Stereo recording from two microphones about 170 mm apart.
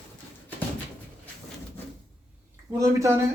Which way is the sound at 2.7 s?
20° right (ahead or behind).